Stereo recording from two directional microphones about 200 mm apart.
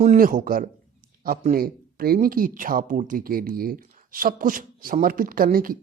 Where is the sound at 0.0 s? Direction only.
40° right (ahead or behind).